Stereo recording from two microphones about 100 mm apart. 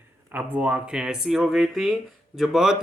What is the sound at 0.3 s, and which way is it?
Speech, 15° right (ahead or behind).